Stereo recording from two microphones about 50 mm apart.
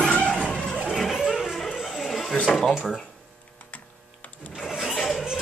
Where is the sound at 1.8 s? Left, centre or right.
Centre.